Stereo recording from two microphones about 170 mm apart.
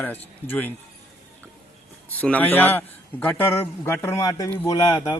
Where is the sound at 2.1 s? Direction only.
10° left (ahead or behind).